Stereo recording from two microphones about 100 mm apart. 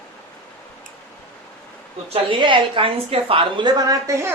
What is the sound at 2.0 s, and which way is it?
Speech, 85° right.